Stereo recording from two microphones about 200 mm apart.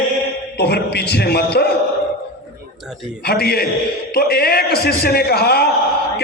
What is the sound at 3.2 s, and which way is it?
A man's voice, 50° left (ahead or behind).